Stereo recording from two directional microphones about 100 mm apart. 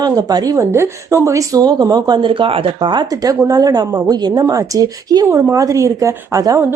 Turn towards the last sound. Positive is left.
turn(degrees=-35)  # may be behind; listen again after turning